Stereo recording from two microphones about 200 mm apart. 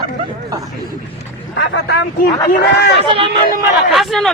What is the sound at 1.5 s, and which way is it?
Speech, 60° left (ahead or behind).